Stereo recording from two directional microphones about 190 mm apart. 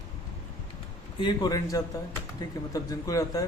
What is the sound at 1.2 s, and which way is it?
Speech, 20° left (ahead or behind).